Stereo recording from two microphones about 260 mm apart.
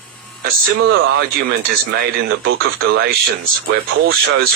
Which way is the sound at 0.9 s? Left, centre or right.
Right.